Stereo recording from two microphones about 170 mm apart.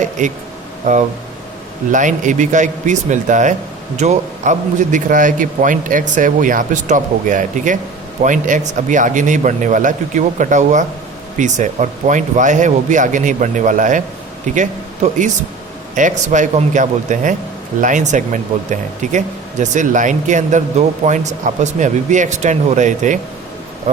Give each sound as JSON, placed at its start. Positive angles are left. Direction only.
{"t": 0.2, "sound": "speech", "side_deg": -45}